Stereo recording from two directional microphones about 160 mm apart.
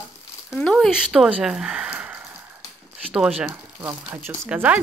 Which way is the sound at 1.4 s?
5° right (ahead or behind).